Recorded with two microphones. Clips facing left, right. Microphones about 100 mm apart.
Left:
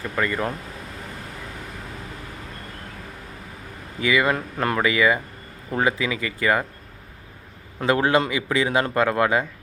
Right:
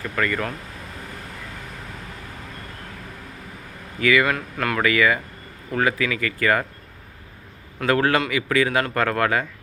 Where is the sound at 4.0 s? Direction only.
20° left (ahead or behind).